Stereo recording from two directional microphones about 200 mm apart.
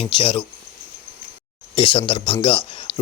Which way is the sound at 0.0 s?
25° left (ahead or behind).